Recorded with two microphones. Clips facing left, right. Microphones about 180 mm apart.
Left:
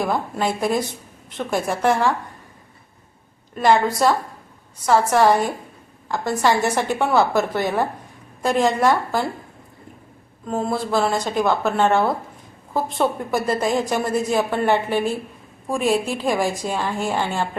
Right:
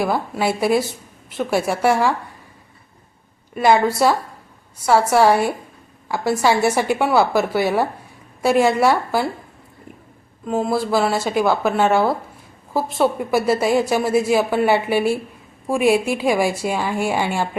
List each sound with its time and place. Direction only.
0.0 s a woman's voice: 5° right (ahead or behind)
3.5 s a woman's voice: 10° right (ahead or behind)
10.4 s a woman's voice: 5° right (ahead or behind)